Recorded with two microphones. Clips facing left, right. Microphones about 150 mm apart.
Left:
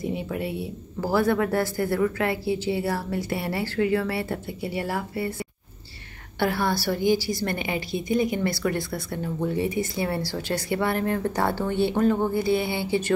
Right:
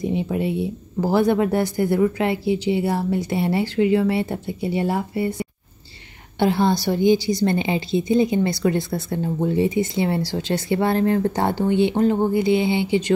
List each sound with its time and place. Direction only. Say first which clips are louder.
0.0 s a woman's voice: right 6 dB; 20° right (ahead or behind)